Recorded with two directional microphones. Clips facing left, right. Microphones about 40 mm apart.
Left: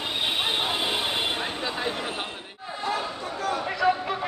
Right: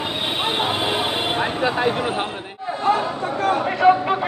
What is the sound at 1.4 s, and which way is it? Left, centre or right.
Vehicle, right.